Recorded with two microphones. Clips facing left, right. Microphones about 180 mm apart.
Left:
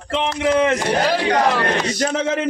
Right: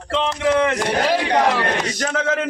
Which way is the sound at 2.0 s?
25° left (ahead or behind).